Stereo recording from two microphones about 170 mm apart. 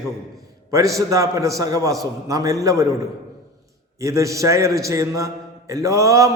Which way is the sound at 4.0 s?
20° right (ahead or behind).